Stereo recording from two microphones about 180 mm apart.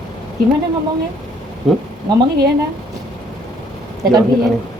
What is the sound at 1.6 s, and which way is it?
Speech, centre (ahead or behind).